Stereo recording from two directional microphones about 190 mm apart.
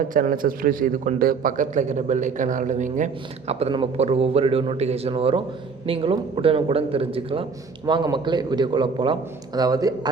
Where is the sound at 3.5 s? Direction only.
30° right (ahead or behind).